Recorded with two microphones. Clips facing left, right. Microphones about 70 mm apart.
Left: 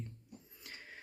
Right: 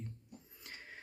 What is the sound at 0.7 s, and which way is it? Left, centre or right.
Printer, right.